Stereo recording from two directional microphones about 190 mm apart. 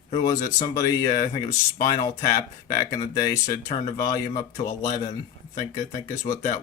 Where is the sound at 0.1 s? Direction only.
20° left (ahead or behind).